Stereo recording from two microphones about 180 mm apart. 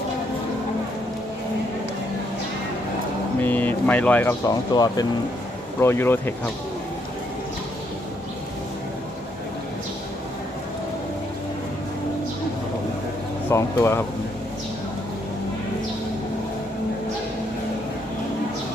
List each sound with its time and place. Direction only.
3.4 s speech: 10° left (ahead or behind)
4.7 s speech: 20° left (ahead or behind)
13.5 s speech: 15° left (ahead or behind)